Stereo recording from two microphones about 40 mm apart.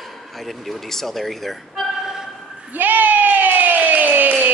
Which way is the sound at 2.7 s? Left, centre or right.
Right.